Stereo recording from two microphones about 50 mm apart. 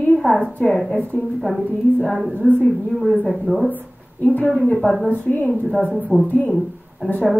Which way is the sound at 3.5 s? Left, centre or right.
Left.